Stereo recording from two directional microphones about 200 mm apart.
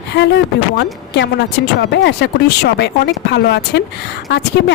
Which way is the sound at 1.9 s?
60° left (ahead or behind).